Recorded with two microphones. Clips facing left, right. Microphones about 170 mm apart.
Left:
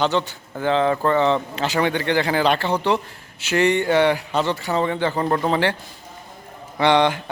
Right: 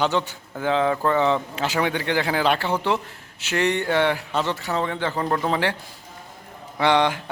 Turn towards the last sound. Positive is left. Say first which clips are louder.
# left 2 dB
turn(degrees=0)  # may be behind; listen again after turning